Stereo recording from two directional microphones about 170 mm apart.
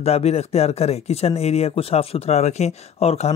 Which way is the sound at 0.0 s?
40° left (ahead or behind).